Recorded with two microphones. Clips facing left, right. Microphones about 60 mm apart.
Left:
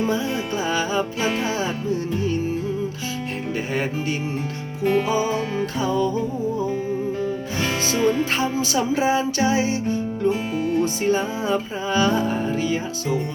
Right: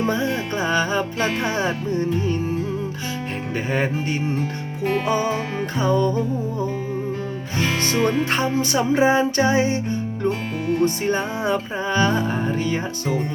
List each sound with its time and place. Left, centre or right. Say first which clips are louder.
0.0 s music: right 1 dB; right
5.0 s music: even; right
8.4 s music: right 1 dB; right